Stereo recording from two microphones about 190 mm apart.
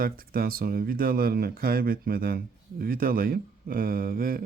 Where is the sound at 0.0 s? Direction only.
50° right (ahead or behind).